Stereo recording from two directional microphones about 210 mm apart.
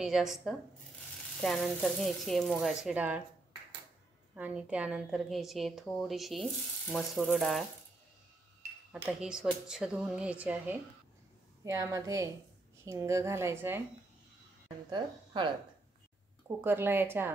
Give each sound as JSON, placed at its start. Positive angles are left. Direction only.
{"t": 0.0, "sound": "a woman's voice", "side_deg": 0}
{"t": 4.4, "sound": "a woman's voice", "side_deg": -5}
{"t": 8.9, "sound": "a woman's voice", "side_deg": -5}
{"t": 14.9, "sound": "a woman's voice", "side_deg": -20}
{"t": 16.6, "sound": "a woman's voice", "side_deg": -10}